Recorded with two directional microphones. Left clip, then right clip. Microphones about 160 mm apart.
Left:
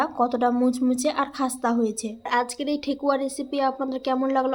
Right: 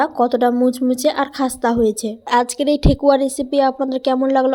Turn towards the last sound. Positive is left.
turn(degrees=-35)  # may be behind; listen again after turning